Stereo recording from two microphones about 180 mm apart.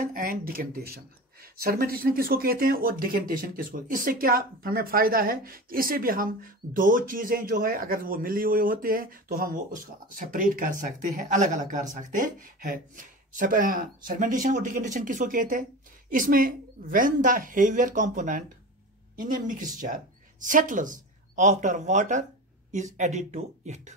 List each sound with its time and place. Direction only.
0.0 s speech: 50° right (ahead or behind)